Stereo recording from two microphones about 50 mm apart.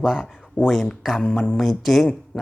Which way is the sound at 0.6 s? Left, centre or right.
Left.